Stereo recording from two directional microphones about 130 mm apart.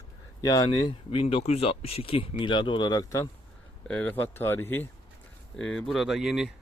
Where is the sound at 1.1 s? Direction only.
45° left (ahead or behind); by 3.3 s 25° left (ahead or behind).